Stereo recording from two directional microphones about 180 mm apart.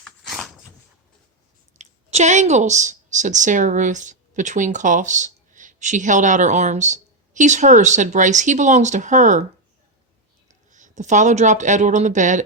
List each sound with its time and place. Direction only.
0.0 s dog: centre (ahead or behind)
1.8 s speech: 40° right (ahead or behind)
10.5 s speech: 45° right (ahead or behind)